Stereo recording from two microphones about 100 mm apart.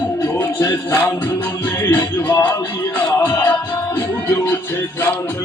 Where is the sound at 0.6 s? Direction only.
25° left (ahead or behind).